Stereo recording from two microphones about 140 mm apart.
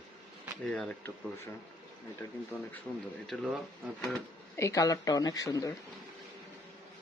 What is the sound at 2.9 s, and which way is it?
Speech, 5° left (ahead or behind).